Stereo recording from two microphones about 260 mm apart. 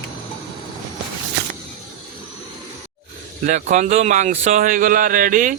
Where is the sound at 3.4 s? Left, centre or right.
Right.